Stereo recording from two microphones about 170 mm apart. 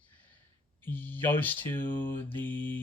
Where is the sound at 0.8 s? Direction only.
10° left (ahead or behind).